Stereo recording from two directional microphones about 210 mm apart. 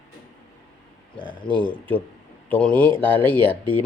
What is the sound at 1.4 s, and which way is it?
Speech, 25° left (ahead or behind).